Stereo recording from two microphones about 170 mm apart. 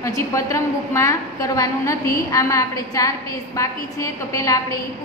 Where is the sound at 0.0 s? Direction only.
20° left (ahead or behind).